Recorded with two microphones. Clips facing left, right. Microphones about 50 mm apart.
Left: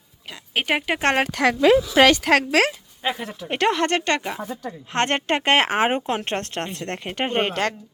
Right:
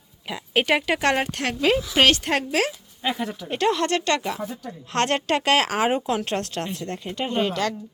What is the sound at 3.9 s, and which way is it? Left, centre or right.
Speech, left.